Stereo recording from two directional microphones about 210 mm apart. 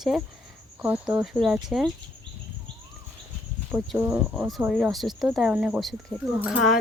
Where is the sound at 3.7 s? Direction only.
5° right (ahead or behind).